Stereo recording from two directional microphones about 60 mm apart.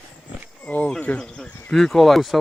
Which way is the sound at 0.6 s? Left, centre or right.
Left.